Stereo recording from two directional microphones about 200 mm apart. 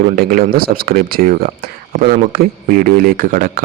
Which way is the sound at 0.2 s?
45° right (ahead or behind).